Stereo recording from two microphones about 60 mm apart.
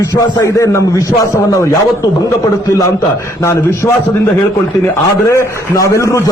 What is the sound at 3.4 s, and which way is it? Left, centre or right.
Speech, left.